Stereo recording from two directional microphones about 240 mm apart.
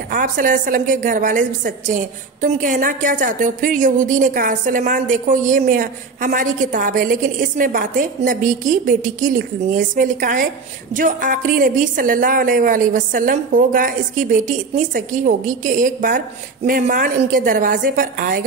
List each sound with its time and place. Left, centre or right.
0.1 s a woman's voice: right